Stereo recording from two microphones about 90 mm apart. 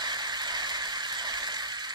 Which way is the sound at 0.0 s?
55° right (ahead or behind).